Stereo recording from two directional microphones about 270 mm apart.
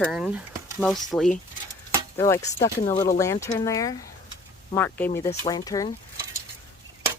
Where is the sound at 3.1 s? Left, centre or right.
Centre.